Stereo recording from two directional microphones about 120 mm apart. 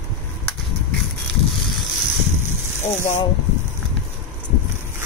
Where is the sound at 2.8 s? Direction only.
75° left (ahead or behind).